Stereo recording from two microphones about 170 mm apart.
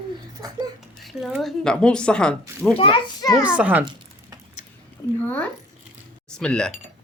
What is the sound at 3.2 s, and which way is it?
Speech, 20° left (ahead or behind).